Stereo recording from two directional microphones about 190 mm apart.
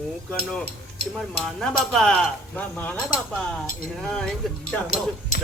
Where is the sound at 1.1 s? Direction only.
5° left (ahead or behind).